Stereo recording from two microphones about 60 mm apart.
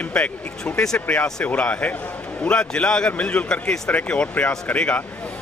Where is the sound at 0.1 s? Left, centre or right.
Centre.